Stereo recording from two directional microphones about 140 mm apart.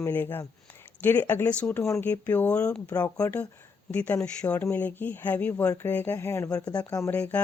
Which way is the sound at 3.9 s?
10° left (ahead or behind).